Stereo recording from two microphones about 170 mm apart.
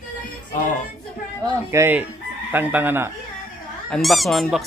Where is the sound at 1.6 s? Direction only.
15° right (ahead or behind).